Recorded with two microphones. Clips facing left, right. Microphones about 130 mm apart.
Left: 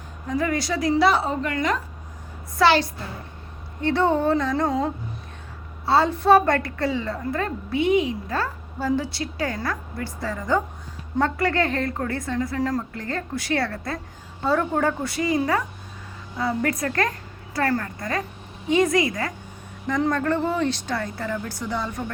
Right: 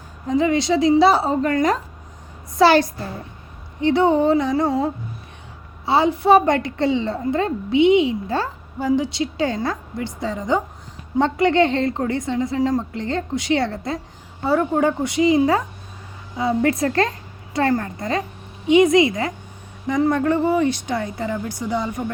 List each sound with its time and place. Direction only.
0.3 s a woman's voice: 20° right (ahead or behind); by 1.8 s 40° right (ahead or behind)
2.6 s a woman's voice: 25° right (ahead or behind)
3.8 s a woman's voice: 15° right (ahead or behind)